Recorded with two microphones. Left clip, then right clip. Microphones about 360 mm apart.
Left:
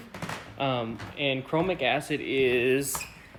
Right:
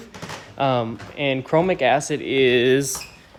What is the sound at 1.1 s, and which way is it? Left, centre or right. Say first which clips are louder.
Speech: right 5 dB; right.